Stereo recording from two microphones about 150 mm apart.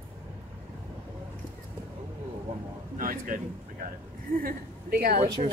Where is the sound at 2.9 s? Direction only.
65° right (ahead or behind).